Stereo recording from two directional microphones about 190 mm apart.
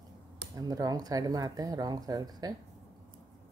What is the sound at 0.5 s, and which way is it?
Speech, 20° right (ahead or behind).